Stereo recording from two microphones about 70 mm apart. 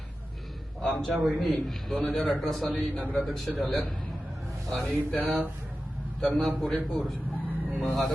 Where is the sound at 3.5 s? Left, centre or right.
Centre.